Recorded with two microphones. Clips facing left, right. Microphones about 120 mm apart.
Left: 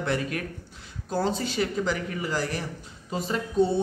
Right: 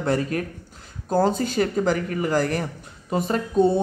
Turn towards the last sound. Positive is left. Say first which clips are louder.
# right 4 dB
turn(degrees=-50)  # may be behind; listen again after turning